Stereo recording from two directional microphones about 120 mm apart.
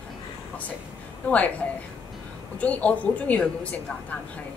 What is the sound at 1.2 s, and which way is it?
Speech, 10° left (ahead or behind).